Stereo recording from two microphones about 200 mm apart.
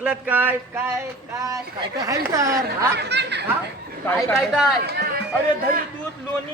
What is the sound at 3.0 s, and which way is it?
Speech, 60° right (ahead or behind).